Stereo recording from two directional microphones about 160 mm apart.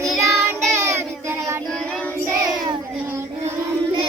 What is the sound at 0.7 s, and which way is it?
Child singing, 15° right (ahead or behind).